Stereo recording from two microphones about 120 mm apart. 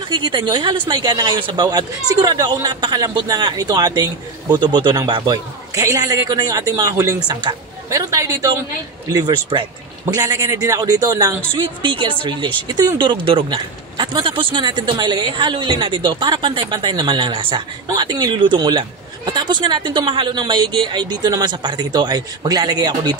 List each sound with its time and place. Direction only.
0.1 s a woman's voice: 40° right (ahead or behind)
11.8 s speech: 45° right (ahead or behind)